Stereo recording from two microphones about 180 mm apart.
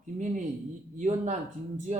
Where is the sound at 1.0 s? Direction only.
40° right (ahead or behind).